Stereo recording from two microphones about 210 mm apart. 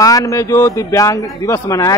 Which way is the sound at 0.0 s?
15° left (ahead or behind).